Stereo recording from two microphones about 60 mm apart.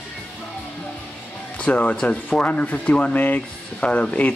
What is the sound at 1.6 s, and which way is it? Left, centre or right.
Speech, left.